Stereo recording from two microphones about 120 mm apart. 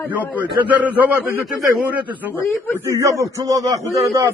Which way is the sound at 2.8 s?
25° right (ahead or behind).